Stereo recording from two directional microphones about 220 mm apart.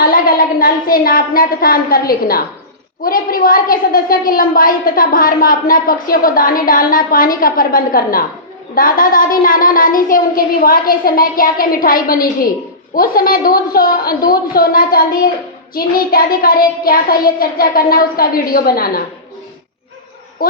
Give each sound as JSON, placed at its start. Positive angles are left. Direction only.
{"t": 0.0, "sound": "a woman's voice", "side_deg": 40}
{"t": 20.4, "sound": "a woman's voice", "side_deg": 40}